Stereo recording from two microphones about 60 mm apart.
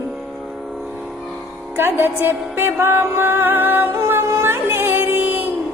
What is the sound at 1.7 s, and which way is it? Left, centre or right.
A woman's voice, right.